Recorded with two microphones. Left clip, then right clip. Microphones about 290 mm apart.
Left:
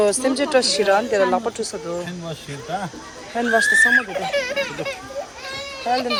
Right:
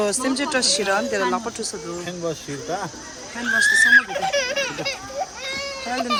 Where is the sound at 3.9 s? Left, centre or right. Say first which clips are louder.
Right 2 dB; right.